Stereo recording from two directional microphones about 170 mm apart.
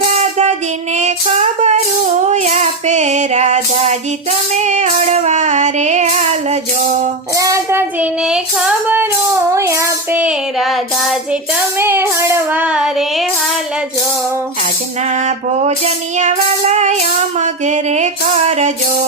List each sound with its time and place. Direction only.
0.1 s child singing: 40° right (ahead or behind)
2.3 s music: 40° right (ahead or behind)
7.3 s child singing: 20° right (ahead or behind); by 11.3 s centre (ahead or behind)
11.8 s child singing: 15° right (ahead or behind)
15.6 s music: 40° right (ahead or behind)